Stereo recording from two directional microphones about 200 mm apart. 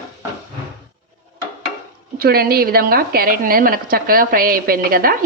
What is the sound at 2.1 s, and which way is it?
A woman's voice, 50° right (ahead or behind).